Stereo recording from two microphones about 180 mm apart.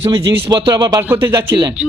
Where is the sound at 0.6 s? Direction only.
25° right (ahead or behind).